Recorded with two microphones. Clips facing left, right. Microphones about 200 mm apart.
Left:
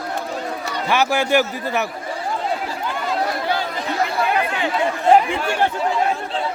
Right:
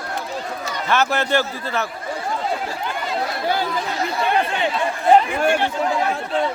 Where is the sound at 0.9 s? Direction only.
15° left (ahead or behind).